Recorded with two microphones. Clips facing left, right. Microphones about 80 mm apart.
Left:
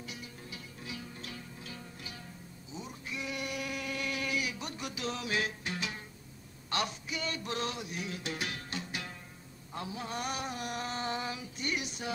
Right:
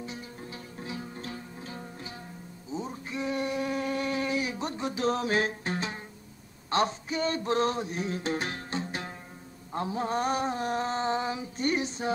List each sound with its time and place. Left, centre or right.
0.0 s music: right
2.7 s a sound: right
6.7 s music: right
9.7 s mantra: right